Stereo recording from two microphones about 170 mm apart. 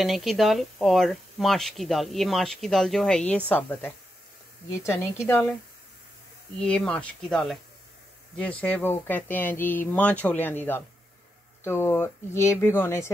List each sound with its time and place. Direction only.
0.0 s speech: centre (ahead or behind)
6.6 s speech: 5° left (ahead or behind)